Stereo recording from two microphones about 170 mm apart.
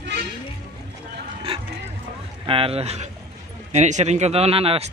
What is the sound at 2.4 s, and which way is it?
Speech, 35° right (ahead or behind).